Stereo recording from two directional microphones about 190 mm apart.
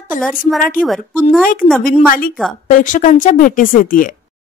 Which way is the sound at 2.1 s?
50° left (ahead or behind).